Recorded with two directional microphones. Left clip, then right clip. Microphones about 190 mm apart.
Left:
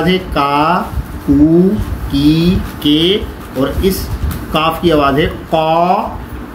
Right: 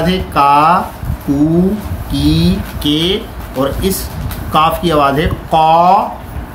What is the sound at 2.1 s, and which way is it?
Speech, 55° right (ahead or behind).